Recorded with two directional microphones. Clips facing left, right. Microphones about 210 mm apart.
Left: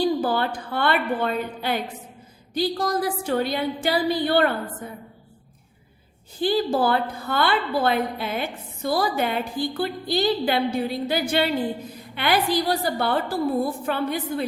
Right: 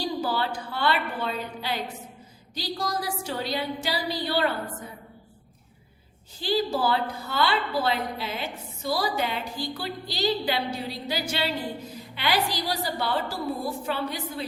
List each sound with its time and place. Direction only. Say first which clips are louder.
0.0 s a woman's voice: left 6 dB; 55° left (ahead or behind)
6.4 s a woman's voice: left 4 dB; 55° left (ahead or behind)